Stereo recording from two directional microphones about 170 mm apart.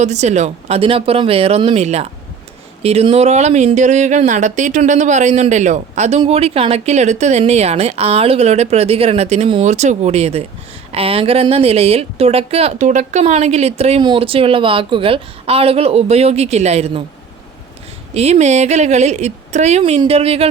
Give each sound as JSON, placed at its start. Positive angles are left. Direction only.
{"t": 0.0, "sound": "speech", "side_deg": -40}
{"t": 18.1, "sound": "speech", "side_deg": -40}